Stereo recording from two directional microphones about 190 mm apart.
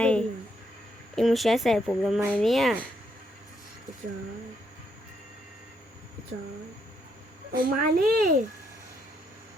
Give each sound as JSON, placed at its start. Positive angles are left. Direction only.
{"t": 0.0, "sound": "a sound", "side_deg": 5}
{"t": 1.1, "sound": "speech", "side_deg": 0}
{"t": 7.5, "sound": "a child's voice", "side_deg": -50}